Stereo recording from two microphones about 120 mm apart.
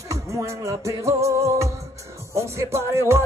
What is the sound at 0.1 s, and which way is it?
Music, 25° right (ahead or behind).